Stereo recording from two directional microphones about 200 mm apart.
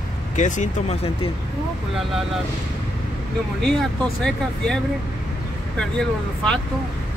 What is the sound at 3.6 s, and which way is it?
Speech, centre (ahead or behind).